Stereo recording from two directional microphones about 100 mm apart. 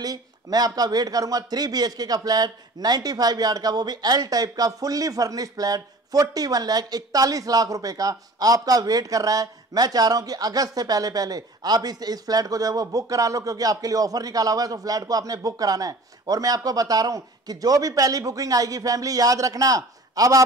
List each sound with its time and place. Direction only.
0.0 s speech: 40° right (ahead or behind)